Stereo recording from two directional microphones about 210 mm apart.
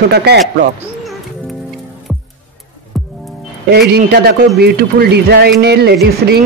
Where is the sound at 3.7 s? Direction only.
50° right (ahead or behind).